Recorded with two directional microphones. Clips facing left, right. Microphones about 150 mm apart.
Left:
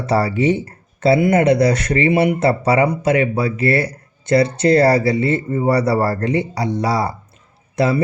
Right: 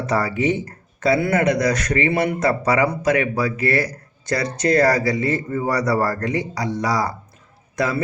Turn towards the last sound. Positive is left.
turn(degrees=30)  # may be behind; listen again after turning